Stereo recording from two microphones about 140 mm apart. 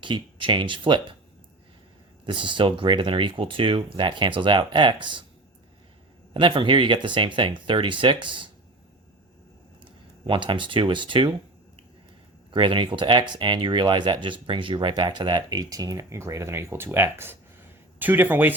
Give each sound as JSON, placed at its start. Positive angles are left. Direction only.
{"t": 0.0, "sound": "speech", "side_deg": -35}
{"t": 2.2, "sound": "speech", "side_deg": -35}
{"t": 6.3, "sound": "speech", "side_deg": -35}
{"t": 9.8, "sound": "speech", "side_deg": -35}
{"t": 12.5, "sound": "speech", "side_deg": -35}